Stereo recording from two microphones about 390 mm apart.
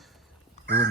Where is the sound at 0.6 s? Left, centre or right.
Right.